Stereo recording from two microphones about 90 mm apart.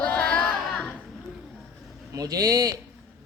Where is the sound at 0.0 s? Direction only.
15° left (ahead or behind).